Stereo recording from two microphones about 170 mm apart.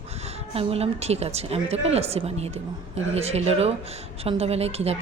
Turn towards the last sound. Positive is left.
turn(degrees=-35)  # may be behind; listen again after turning